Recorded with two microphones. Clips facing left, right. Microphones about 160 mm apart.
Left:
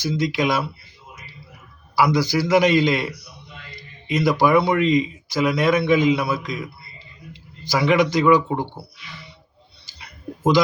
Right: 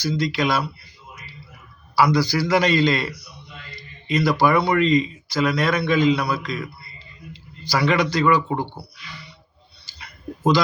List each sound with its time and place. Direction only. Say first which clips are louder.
0.0 s speech: left 1 dB; 20° left (ahead or behind)
2.0 s a man's voice: even; 20° left (ahead or behind)
7.6 s a man's voice: left 2 dB; 20° left (ahead or behind)